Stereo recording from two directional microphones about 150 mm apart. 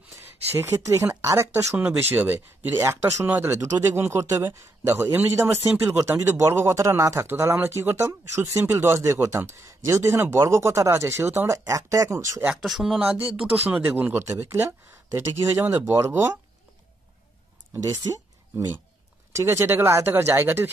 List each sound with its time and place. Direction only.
0.6 s speech: 20° right (ahead or behind)
12.6 s speech: centre (ahead or behind)
17.8 s speech: 20° right (ahead or behind)
19.3 s speech: 20° right (ahead or behind)